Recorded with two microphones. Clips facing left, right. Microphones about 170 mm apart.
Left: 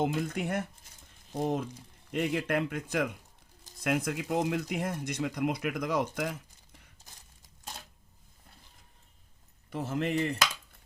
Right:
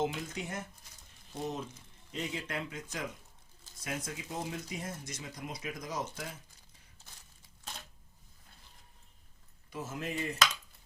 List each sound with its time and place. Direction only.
0.0 s speech: 55° left (ahead or behind)
1.3 s speech: 50° left (ahead or behind)
2.1 s speech: 60° left (ahead or behind); by 6.8 s 75° left (ahead or behind)
9.6 s speech: 60° left (ahead or behind)